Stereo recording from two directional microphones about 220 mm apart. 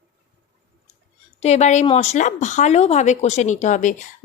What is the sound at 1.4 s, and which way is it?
Speech, 30° left (ahead or behind).